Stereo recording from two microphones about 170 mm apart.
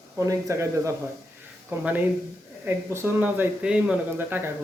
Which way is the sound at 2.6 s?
15° right (ahead or behind).